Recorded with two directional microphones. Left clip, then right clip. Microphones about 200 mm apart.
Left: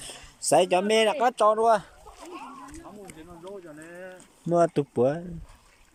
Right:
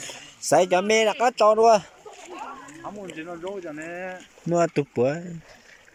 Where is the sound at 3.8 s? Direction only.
30° right (ahead or behind).